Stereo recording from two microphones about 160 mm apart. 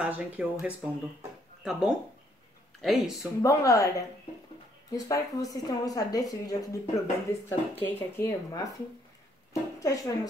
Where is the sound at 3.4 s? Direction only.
20° left (ahead or behind).